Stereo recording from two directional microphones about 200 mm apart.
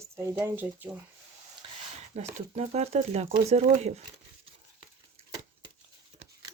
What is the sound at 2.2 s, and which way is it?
Speech, 35° right (ahead or behind).